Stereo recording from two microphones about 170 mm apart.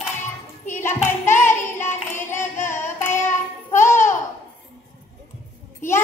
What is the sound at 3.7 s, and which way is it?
Babbling, 15° left (ahead or behind).